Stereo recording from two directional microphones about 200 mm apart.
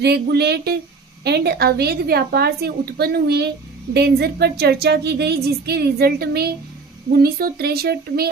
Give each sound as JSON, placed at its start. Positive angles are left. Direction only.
{"t": 0.0, "sound": "speech", "side_deg": -55}